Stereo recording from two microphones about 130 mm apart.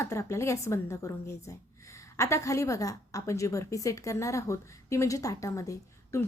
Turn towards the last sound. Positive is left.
turn(degrees=25)  # may be behind; listen again after turning